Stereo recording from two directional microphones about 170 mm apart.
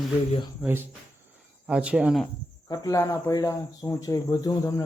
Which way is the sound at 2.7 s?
20° left (ahead or behind).